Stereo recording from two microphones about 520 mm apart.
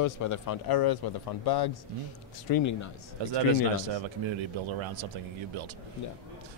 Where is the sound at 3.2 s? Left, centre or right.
Right.